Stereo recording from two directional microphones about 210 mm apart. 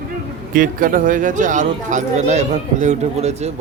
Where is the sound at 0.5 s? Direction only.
40° right (ahead or behind).